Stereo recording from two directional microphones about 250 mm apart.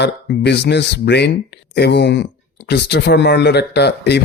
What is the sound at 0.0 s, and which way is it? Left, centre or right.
Speech, left.